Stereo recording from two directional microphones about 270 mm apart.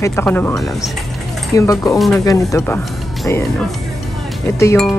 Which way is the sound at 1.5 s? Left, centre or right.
Centre.